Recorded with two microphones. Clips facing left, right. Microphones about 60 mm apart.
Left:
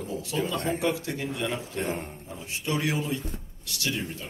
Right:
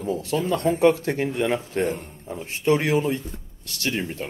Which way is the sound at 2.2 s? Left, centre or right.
Right.